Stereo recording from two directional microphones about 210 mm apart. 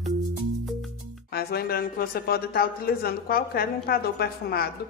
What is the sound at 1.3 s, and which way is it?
Speech, 50° left (ahead or behind).